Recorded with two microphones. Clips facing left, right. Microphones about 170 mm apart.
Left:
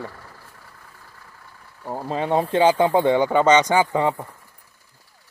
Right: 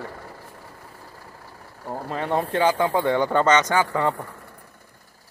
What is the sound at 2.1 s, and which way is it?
Speech, 15° left (ahead or behind).